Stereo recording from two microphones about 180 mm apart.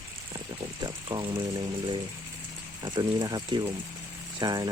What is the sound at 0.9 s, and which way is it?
Speech, 25° right (ahead or behind).